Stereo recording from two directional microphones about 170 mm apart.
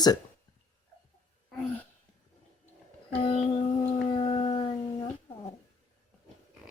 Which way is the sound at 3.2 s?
30° left (ahead or behind).